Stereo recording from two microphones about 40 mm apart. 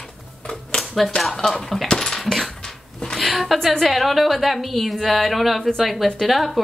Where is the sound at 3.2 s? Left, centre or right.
Centre.